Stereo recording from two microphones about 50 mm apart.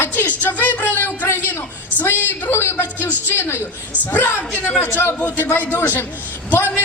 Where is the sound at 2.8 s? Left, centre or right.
Left.